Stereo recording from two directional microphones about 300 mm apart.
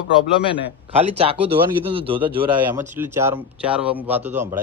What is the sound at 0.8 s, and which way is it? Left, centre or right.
Speech, centre.